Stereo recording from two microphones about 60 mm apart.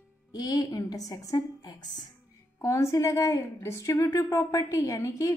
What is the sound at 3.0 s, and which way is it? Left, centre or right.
A woman's voice, left.